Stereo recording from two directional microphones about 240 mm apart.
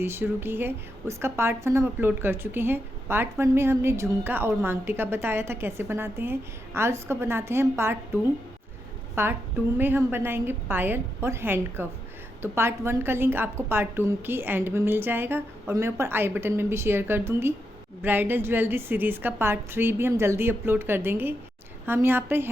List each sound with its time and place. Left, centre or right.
0.0 s a woman's voice: centre
9.2 s a woman's voice: centre